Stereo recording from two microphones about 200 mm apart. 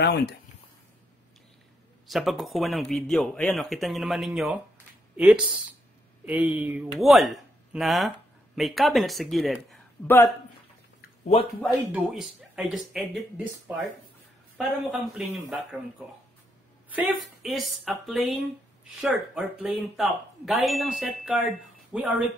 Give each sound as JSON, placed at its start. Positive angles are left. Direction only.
{"t": 0.0, "sound": "speech", "side_deg": 55}
{"t": 2.0, "sound": "speech", "side_deg": 0}
{"t": 10.0, "sound": "speech", "side_deg": 15}
{"t": 11.6, "sound": "speech", "side_deg": -5}
{"t": 14.6, "sound": "speech", "side_deg": -5}
{"t": 16.9, "sound": "speech", "side_deg": -5}